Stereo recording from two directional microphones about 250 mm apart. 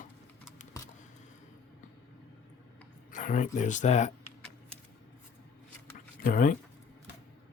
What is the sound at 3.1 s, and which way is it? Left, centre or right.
Speech, left.